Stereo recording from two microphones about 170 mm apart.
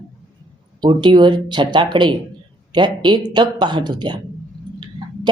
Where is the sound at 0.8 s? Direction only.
25° right (ahead or behind).